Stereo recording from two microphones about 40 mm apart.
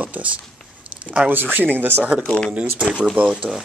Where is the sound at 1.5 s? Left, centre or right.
Right.